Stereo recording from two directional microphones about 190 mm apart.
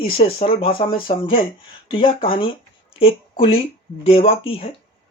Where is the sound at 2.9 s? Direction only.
30° left (ahead or behind).